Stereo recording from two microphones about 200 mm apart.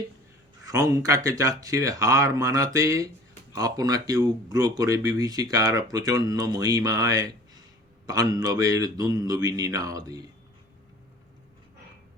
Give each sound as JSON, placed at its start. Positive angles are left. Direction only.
{"t": 0.6, "sound": "speech", "side_deg": -15}